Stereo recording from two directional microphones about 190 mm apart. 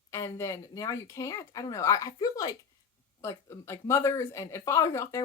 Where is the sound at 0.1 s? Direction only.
15° left (ahead or behind).